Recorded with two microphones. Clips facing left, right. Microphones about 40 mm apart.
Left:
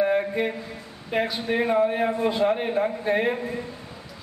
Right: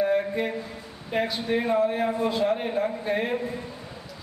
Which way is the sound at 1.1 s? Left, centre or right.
Centre.